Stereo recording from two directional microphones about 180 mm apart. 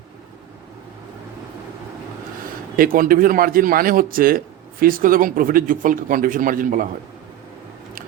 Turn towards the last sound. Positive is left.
turn(degrees=-50)  # may be behind; listen again after turning